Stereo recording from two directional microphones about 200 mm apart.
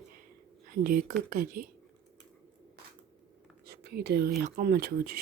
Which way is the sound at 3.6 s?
55° right (ahead or behind).